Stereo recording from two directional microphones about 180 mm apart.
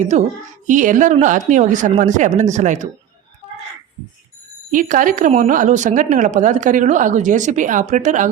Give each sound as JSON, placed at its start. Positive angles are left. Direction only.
{"t": 0.0, "sound": "speech", "side_deg": -40}
{"t": 4.7, "sound": "speech", "side_deg": -50}